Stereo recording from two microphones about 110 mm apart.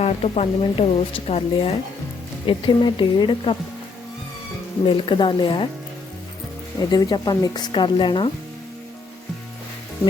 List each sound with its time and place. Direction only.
0.0 s a woman's voice: 70° left (ahead or behind)
2.5 s speech: 45° left (ahead or behind)
4.9 s speech: 50° left (ahead or behind)
6.9 s speech: 40° left (ahead or behind)